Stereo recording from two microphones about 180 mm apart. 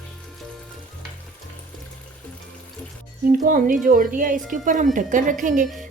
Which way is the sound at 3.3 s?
50° right (ahead or behind).